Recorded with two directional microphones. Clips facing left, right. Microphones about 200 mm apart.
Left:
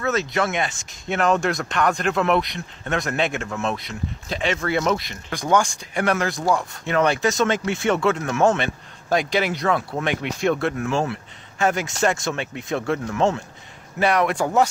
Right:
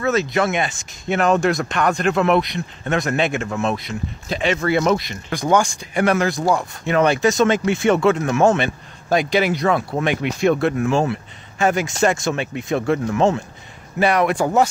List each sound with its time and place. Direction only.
0.0 s speech: 10° right (ahead or behind)
6.4 s speech: 25° right (ahead or behind)
6.9 s speech: 15° right (ahead or behind)